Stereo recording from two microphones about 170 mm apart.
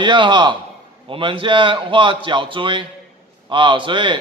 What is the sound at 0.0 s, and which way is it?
A man's voice, 30° right (ahead or behind).